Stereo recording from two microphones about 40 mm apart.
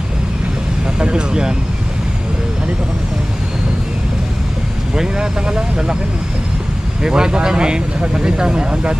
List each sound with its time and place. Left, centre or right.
0.9 s vehicle: right
4.9 s speech: centre
7.0 s speech: centre